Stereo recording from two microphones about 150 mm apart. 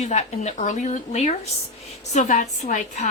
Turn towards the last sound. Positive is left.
turn(degrees=55)  # may be behind; listen again after turning